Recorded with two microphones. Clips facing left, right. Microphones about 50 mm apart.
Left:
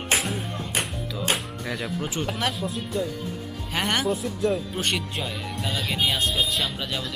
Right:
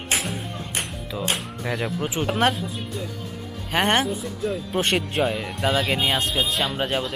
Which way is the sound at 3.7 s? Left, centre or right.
Right.